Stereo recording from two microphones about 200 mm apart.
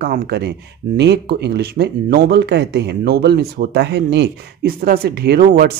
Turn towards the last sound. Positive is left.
turn(degrees=-45)  # may be behind; listen again after turning